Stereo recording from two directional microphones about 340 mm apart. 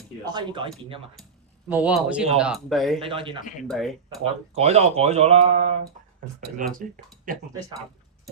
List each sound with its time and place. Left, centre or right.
0.3 s a man's voice: centre
1.7 s speech: centre
3.0 s a man's voice: centre
3.7 s speech: centre
4.2 s speech: centre